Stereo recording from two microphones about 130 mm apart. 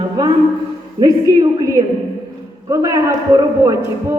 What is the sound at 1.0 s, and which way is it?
A man's voice, 30° right (ahead or behind).